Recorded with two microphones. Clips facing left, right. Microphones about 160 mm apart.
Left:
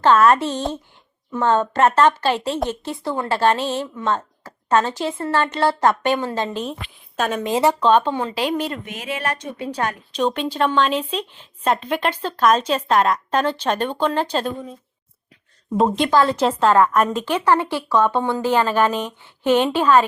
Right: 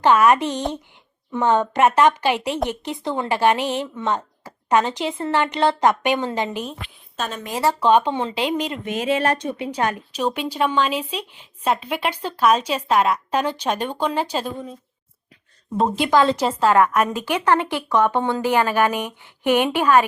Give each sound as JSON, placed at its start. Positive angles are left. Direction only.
{"t": 0.0, "sound": "speech", "side_deg": -15}
{"t": 7.2, "sound": "speech", "side_deg": 10}
{"t": 7.4, "sound": "speech", "side_deg": 25}
{"t": 7.8, "sound": "speech", "side_deg": -10}
{"t": 9.7, "sound": "speech", "side_deg": -10}
{"t": 16.1, "sound": "speech", "side_deg": -15}
{"t": 16.5, "sound": "a woman's voice", "side_deg": -5}
{"t": 16.7, "sound": "speech", "side_deg": -15}